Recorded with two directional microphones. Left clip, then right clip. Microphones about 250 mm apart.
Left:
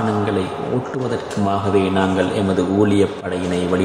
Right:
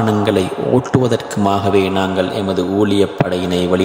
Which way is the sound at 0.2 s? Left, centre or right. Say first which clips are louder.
Right 5 dB; right.